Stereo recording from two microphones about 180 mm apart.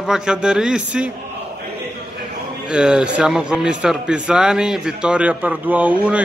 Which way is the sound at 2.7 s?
5° right (ahead or behind).